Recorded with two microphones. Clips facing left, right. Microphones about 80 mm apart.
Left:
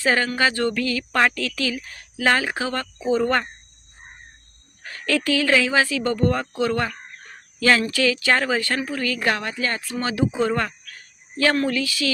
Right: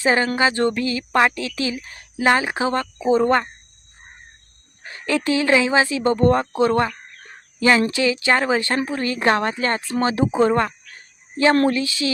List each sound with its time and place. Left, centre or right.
0.0 s a woman's voice: right
4.8 s a woman's voice: right
10.9 s cricket: right
11.7 s a woman's voice: right